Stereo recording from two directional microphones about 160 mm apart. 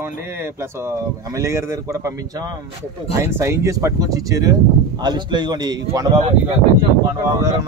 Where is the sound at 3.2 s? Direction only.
15° right (ahead or behind).